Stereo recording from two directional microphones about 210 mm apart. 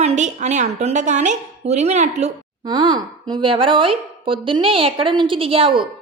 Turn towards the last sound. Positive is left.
turn(degrees=-25)  # may be behind; listen again after turning